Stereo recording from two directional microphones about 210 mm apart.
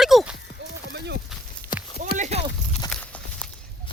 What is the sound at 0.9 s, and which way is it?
Speech, 50° right (ahead or behind).